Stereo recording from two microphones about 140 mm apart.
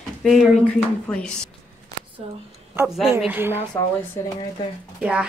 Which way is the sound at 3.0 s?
15° right (ahead or behind).